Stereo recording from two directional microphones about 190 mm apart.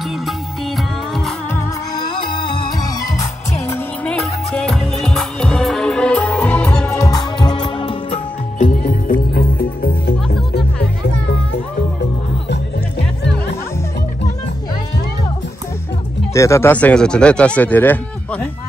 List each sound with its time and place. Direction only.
1.1 s music: centre (ahead or behind)
2.0 s music: 50° left (ahead or behind)
3.6 s music: 10° left (ahead or behind)
7.0 s music: 20° left (ahead or behind)
8.5 s music: 45° left (ahead or behind)
16.3 s speech: 15° left (ahead or behind)